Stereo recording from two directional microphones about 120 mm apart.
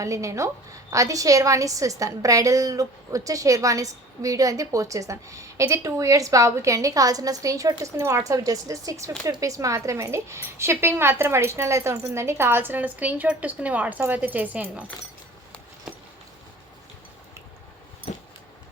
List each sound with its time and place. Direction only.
0.0 s a woman's voice: 25° right (ahead or behind)